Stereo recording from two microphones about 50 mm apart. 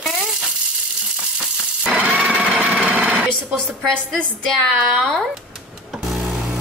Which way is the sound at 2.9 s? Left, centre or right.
Right.